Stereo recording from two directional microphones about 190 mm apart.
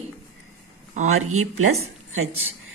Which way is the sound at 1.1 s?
90° right.